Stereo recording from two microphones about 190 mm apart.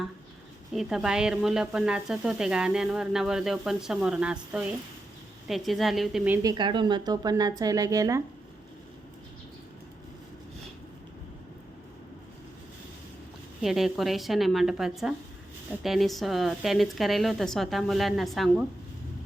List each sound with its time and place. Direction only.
0.7 s speech: centre (ahead or behind)
6.4 s a woman's voice: 20° right (ahead or behind)
13.6 s speech: centre (ahead or behind)